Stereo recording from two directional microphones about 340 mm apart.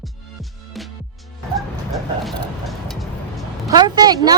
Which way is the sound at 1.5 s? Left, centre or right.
Centre.